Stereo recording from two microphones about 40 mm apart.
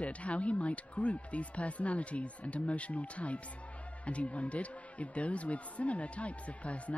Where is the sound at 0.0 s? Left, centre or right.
Left.